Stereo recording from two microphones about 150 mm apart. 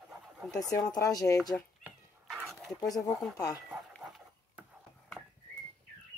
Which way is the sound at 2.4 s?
Centre (ahead or behind).